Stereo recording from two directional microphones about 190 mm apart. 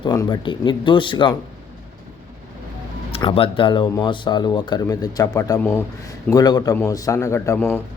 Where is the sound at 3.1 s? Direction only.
30° left (ahead or behind); by 7.8 s 15° left (ahead or behind).